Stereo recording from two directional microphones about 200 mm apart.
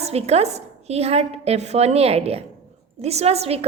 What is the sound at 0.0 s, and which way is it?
A woman's voice, 30° right (ahead or behind).